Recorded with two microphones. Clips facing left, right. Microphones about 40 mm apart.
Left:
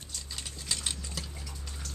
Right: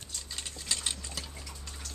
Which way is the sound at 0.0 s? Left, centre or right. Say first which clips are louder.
Even; centre.